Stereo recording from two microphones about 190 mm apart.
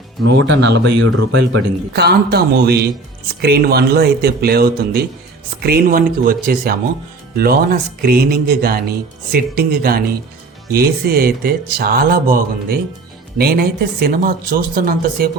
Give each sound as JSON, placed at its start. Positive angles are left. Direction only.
{"t": 0.3, "sound": "speech", "side_deg": -70}